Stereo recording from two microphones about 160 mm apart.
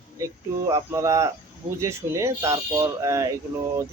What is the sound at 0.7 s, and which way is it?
Speech, 20° right (ahead or behind).